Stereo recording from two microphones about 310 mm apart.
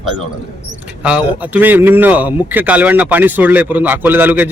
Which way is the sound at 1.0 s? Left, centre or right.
Centre.